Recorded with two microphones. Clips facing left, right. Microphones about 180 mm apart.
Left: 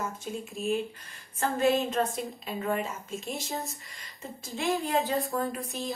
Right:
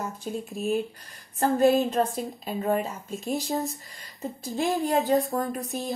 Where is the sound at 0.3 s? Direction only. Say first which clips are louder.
Right 3 dB; 40° right (ahead or behind).